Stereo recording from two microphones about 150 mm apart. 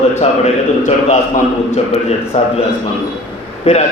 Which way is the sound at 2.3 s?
50° left (ahead or behind).